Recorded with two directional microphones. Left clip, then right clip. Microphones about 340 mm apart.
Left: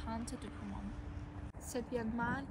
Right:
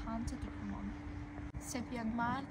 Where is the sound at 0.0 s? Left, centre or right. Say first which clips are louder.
Right 1 dB; centre.